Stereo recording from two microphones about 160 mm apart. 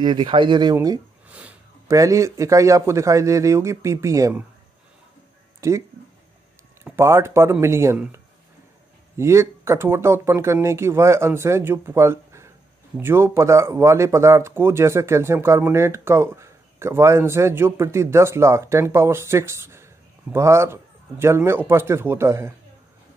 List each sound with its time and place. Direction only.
0.0 s a man's voice: 30° right (ahead or behind)
1.9 s a man's voice: 20° right (ahead or behind)
5.6 s speech: 20° right (ahead or behind)